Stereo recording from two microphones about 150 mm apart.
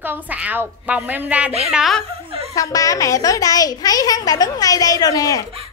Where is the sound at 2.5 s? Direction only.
20° left (ahead or behind).